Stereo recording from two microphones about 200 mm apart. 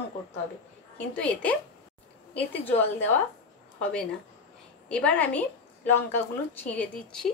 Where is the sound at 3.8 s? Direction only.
5° left (ahead or behind).